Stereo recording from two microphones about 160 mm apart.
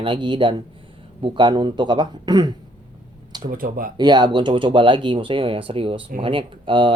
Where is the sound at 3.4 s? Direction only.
60° right (ahead or behind).